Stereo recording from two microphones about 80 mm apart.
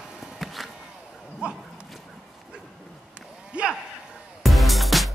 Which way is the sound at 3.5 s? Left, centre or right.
Centre.